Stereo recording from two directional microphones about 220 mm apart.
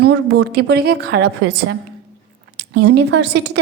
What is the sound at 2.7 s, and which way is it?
Speech, 50° right (ahead or behind).